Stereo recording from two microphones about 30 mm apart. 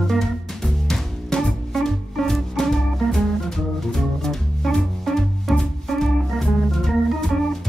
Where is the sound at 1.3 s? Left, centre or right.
Left.